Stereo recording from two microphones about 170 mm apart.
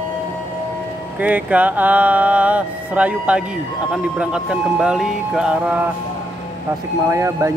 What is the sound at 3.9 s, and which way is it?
Speech, 5° right (ahead or behind).